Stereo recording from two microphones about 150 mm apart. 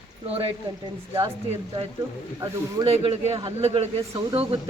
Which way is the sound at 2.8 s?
45° right (ahead or behind).